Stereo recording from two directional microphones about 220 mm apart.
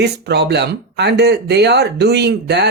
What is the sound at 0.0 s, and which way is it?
Speech, 50° right (ahead or behind).